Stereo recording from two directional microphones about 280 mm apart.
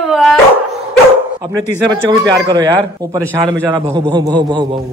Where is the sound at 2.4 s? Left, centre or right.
Centre.